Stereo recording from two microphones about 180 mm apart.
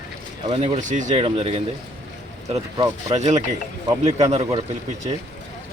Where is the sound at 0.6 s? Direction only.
40° right (ahead or behind).